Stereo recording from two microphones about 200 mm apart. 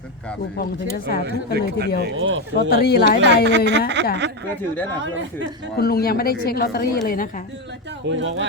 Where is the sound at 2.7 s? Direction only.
50° left (ahead or behind).